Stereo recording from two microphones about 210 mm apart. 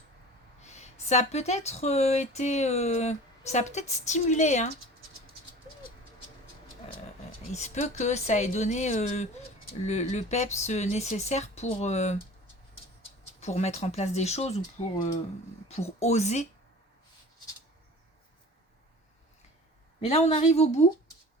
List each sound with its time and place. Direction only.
0.6 s speech: 35° left (ahead or behind)
7.5 s speech: 35° left (ahead or behind)
13.4 s speech: 30° left (ahead or behind)
20.1 s speech: 30° left (ahead or behind)